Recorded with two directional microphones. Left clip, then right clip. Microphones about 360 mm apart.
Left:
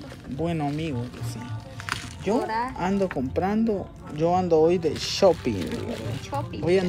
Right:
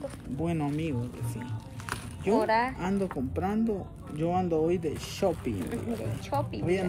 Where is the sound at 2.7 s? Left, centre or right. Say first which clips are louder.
Left 6 dB; centre.